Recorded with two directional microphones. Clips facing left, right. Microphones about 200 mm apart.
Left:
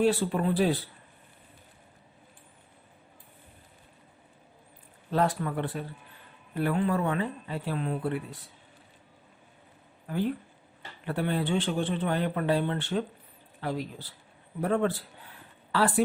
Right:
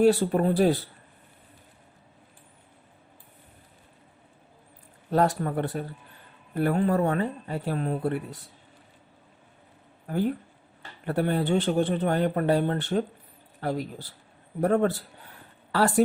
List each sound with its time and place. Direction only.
0.0 s speech: 40° right (ahead or behind)
5.1 s speech: 40° right (ahead or behind)
10.1 s speech: 45° right (ahead or behind)